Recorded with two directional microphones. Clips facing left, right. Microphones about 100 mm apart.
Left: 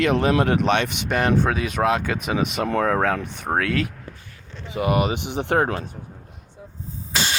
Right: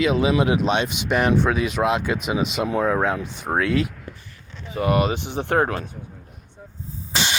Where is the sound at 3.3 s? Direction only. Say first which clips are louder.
Right 1 dB; 55° left (ahead or behind).